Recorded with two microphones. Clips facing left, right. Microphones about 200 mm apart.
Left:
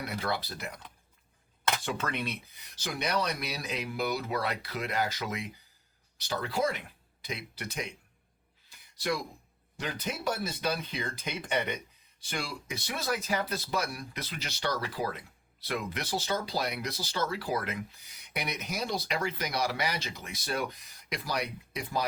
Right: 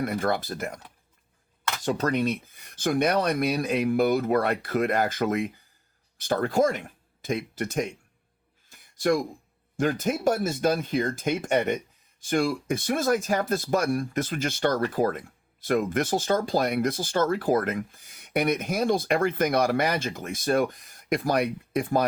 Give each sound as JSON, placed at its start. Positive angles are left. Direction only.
{"t": 0.0, "sound": "speech", "side_deg": -50}
{"t": 1.8, "sound": "speech", "side_deg": -40}
{"t": 8.7, "sound": "a sound", "side_deg": -50}
{"t": 9.7, "sound": "speech", "side_deg": -50}